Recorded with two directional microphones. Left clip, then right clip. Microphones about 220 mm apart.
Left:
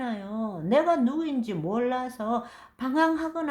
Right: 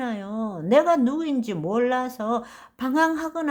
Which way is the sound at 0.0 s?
35° right (ahead or behind).